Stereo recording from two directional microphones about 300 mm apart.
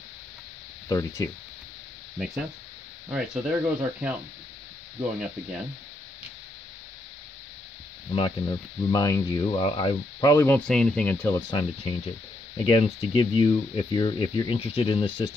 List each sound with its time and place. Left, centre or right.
0.8 s speech: centre
2.1 s speech: centre
8.1 s speech: centre